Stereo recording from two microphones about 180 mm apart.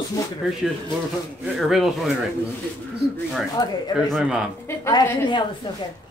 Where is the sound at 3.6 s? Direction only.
25° left (ahead or behind).